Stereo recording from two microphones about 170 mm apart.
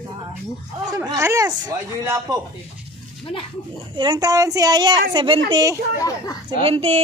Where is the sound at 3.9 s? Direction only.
25° right (ahead or behind).